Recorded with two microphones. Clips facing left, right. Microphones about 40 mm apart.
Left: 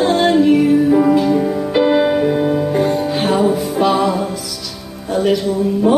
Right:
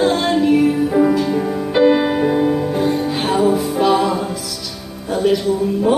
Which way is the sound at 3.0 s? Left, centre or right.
Centre.